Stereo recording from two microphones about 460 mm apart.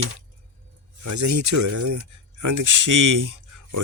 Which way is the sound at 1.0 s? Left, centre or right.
Right.